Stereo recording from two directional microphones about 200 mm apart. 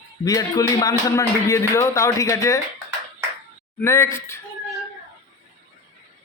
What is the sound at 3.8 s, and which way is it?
Speech, 15° left (ahead or behind).